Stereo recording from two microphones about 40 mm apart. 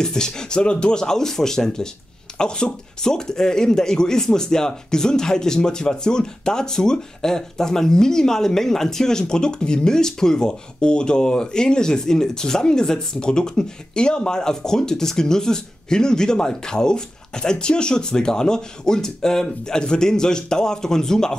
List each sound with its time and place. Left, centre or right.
0.0 s speech: centre